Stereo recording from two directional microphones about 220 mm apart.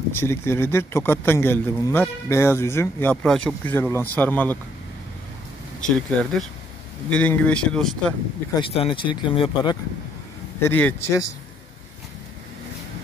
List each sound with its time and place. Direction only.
0.1 s speech: 10° left (ahead or behind)
5.8 s speech: 5° left (ahead or behind)
8.5 s speech: 25° left (ahead or behind)
10.6 s speech: 10° left (ahead or behind)